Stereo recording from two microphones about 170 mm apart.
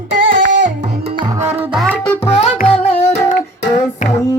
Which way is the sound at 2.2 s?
35° left (ahead or behind).